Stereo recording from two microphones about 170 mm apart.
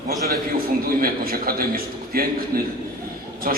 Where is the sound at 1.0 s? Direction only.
60° right (ahead or behind).